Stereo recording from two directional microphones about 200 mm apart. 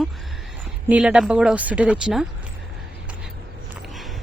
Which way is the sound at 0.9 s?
5° right (ahead or behind).